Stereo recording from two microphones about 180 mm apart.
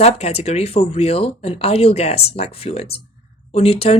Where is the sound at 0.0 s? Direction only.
35° left (ahead or behind).